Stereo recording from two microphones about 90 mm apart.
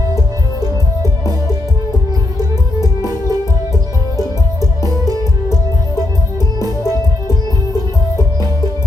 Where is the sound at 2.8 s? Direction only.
45° right (ahead or behind).